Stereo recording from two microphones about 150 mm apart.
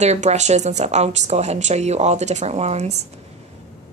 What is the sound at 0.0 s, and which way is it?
Speech, 50° right (ahead or behind).